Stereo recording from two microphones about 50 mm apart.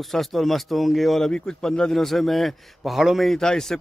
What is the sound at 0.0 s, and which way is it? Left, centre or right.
A man's voice, centre.